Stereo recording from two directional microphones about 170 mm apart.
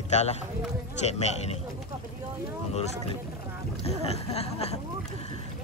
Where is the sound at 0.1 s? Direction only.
40° left (ahead or behind).